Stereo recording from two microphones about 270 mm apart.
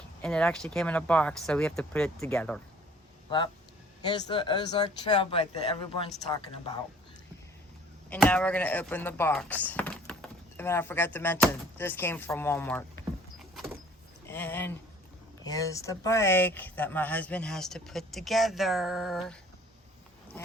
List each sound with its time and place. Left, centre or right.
0.2 s speech: centre
3.2 s speech: centre
8.1 s speech: centre
14.3 s speech: centre